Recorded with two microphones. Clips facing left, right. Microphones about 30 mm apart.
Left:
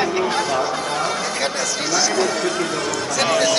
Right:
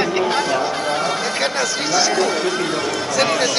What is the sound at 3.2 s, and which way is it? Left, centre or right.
Speech, centre.